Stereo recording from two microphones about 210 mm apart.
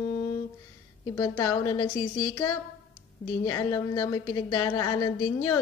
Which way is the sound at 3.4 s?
15° left (ahead or behind).